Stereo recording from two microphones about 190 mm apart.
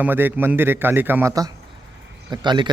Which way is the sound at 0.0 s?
10° right (ahead or behind).